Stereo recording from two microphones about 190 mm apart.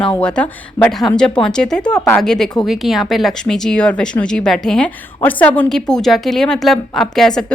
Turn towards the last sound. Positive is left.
turn(degrees=5)  # may be behind; listen again after turning